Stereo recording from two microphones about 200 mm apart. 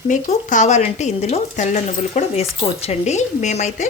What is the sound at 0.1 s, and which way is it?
Speech, 40° left (ahead or behind).